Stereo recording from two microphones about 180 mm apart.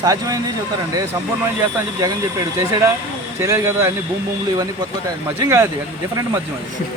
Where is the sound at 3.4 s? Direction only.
15° right (ahead or behind).